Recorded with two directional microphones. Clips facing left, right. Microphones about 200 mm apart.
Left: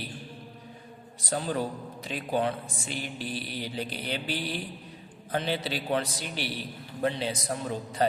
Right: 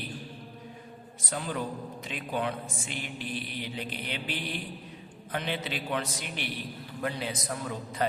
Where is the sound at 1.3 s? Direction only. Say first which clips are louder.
Left 4 dB; 35° left (ahead or behind).